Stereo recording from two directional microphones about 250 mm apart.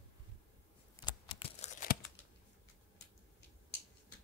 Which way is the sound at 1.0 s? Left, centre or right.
Left.